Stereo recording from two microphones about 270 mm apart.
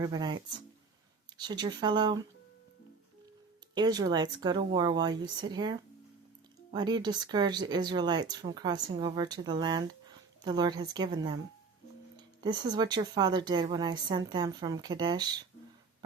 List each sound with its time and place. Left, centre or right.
0.0 s speech: centre
1.4 s speech: centre
3.8 s speech: centre